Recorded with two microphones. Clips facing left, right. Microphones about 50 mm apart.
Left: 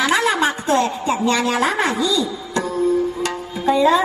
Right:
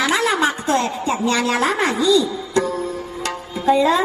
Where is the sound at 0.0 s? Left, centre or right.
Left.